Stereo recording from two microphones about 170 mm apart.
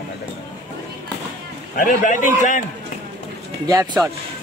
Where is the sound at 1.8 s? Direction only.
50° left (ahead or behind).